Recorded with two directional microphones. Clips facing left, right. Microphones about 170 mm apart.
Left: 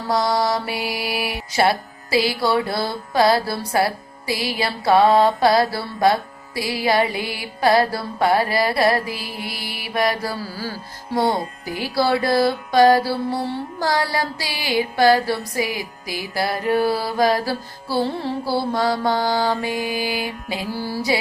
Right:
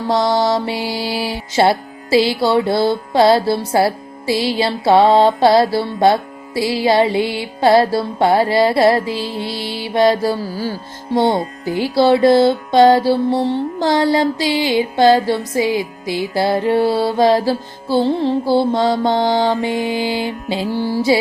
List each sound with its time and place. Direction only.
0.1 s mantra: 25° right (ahead or behind)